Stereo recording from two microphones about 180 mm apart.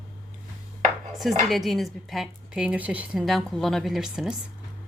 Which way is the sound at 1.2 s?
Centre (ahead or behind).